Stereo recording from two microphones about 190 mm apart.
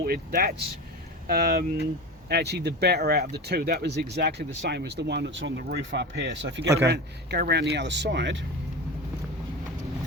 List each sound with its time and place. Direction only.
0.0 s speech: 50° right (ahead or behind); by 8.4 s 75° right (ahead or behind)